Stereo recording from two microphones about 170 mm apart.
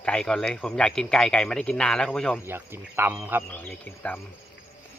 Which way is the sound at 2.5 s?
15° right (ahead or behind).